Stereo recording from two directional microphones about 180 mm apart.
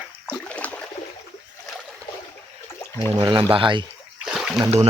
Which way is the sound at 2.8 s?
15° left (ahead or behind).